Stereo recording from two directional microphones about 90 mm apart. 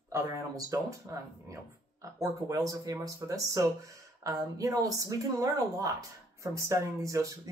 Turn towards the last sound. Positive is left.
turn(degrees=-35)  # may be behind; listen again after turning